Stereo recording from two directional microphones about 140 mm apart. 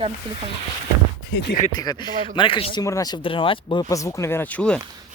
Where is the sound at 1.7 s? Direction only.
30° left (ahead or behind).